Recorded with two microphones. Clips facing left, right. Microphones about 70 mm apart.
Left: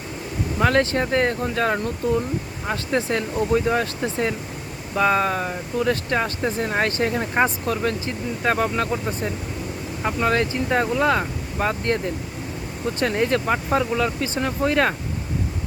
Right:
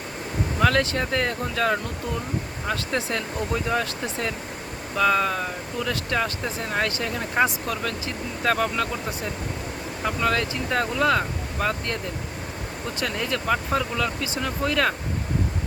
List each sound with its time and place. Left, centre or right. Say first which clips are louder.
0.6 s speech: left 3 dB; left
13.0 s speech: left 7 dB; left